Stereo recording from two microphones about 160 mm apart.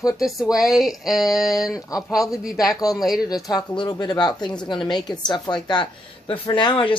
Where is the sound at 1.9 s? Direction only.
20° left (ahead or behind).